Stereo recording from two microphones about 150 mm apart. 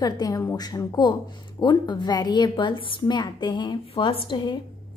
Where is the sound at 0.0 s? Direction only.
25° left (ahead or behind).